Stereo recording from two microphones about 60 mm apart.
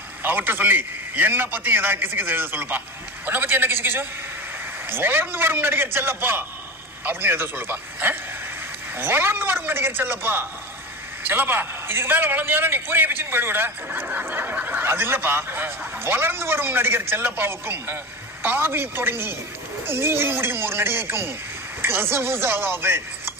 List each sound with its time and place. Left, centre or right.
0.2 s speech: right
14.3 s snicker: right
14.5 s speech: right